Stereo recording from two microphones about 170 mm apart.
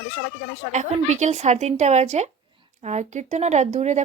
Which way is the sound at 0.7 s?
45° right (ahead or behind).